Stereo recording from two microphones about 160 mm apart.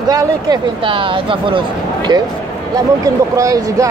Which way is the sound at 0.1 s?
25° right (ahead or behind).